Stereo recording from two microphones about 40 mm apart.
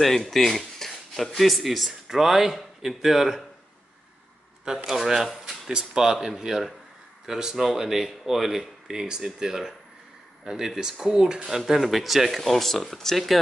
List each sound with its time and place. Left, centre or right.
0.0 s speech: centre
2.0 s speech: centre
4.8 s speech: centre
5.7 s speech: centre
11.4 s speech: centre